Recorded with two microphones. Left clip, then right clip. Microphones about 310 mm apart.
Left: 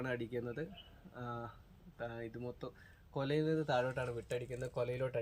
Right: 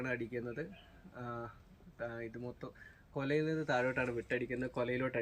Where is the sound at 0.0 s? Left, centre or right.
Centre.